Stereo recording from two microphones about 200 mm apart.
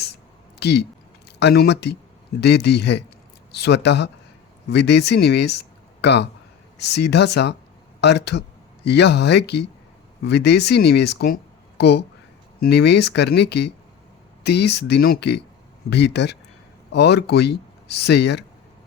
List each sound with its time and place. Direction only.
0.6 s speech: 55° left (ahead or behind)